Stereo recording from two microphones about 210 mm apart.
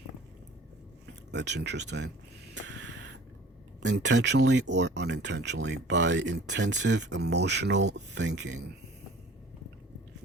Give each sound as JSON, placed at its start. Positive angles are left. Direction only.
{"t": 1.3, "sound": "speech", "side_deg": -55}
{"t": 2.6, "sound": "a sound", "side_deg": -55}
{"t": 3.8, "sound": "speech", "side_deg": -60}